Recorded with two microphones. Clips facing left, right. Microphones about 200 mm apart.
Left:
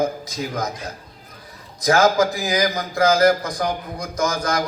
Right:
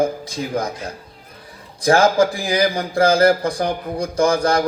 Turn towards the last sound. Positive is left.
turn(degrees=-30)  # may be behind; listen again after turning